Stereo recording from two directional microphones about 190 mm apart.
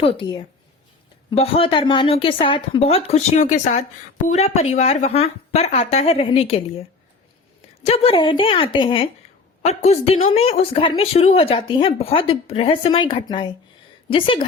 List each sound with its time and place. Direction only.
0.0 s a woman's voice: 25° left (ahead or behind)
7.9 s speech: 30° left (ahead or behind)